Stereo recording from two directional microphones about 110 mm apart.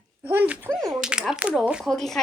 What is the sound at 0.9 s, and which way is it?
Speech, 5° right (ahead or behind).